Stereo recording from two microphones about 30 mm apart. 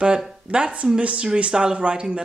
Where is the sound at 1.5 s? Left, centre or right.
Right.